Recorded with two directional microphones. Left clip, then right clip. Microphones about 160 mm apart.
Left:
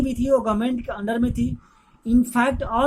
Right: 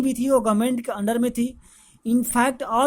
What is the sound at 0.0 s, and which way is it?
Speech, 50° right (ahead or behind).